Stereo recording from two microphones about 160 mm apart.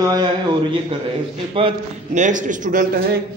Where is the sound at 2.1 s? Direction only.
50° right (ahead or behind).